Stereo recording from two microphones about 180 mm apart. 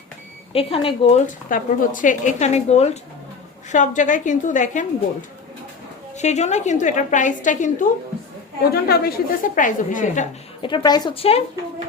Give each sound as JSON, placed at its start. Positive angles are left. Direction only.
{"t": 0.5, "sound": "speech", "side_deg": 30}
{"t": 1.5, "sound": "a woman's voice", "side_deg": 50}
{"t": 6.1, "sound": "a woman's voice", "side_deg": 40}
{"t": 8.7, "sound": "a woman's voice", "side_deg": 60}
{"t": 9.6, "sound": "a woman's voice", "side_deg": 45}
{"t": 10.6, "sound": "a woman's voice", "side_deg": 25}